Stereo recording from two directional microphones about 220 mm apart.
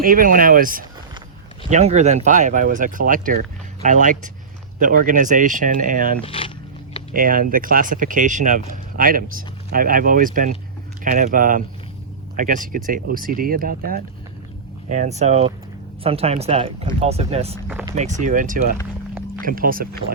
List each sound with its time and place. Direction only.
0.0 s speech: 40° right (ahead or behind)
6.2 s speech: 25° left (ahead or behind)
7.1 s speech: 40° right (ahead or behind)